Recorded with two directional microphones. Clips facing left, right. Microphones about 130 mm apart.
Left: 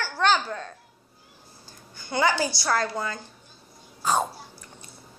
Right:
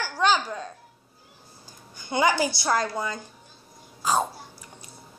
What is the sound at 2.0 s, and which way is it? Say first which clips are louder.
A woman's voice: right 1 dB; 15° right (ahead or behind).